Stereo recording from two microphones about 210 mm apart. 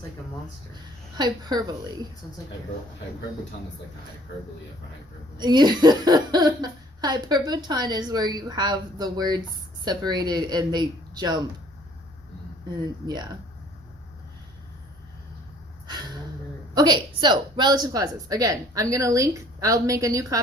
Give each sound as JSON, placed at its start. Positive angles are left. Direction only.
{"t": 1.1, "sound": "speech", "side_deg": -20}
{"t": 5.4, "sound": "speech", "side_deg": -20}
{"t": 12.8, "sound": "speech", "side_deg": -20}
{"t": 16.7, "sound": "speech", "side_deg": -20}